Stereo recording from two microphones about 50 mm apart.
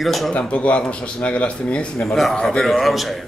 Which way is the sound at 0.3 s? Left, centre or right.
Left.